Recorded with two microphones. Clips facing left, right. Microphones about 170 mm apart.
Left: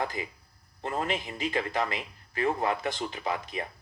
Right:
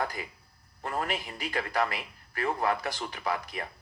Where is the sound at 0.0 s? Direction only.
25° left (ahead or behind).